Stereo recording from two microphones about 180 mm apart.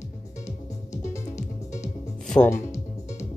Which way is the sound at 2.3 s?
5° left (ahead or behind).